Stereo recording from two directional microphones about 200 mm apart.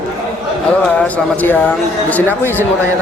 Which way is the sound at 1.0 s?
10° left (ahead or behind).